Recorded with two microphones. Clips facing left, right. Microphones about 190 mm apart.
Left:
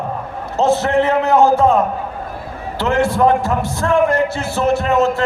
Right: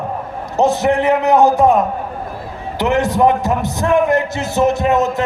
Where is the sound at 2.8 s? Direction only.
15° right (ahead or behind).